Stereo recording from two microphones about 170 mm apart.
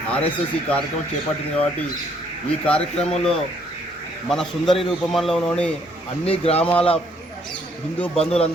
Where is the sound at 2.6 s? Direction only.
5° left (ahead or behind).